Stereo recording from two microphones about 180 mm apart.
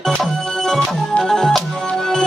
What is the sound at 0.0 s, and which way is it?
Music, centre (ahead or behind).